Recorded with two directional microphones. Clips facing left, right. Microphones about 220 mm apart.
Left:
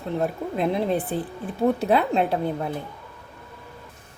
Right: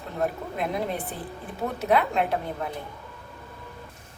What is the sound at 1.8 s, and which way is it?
Speech, 30° left (ahead or behind).